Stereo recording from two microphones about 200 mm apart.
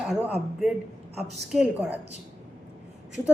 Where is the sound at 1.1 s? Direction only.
35° right (ahead or behind).